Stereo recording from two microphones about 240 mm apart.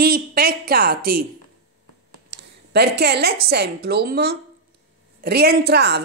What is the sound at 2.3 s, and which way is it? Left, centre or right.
A woman's voice, right.